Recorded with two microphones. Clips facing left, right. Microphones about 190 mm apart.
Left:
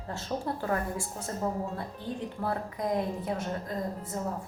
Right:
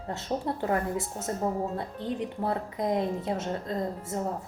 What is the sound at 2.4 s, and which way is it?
A woman's voice, 20° right (ahead or behind).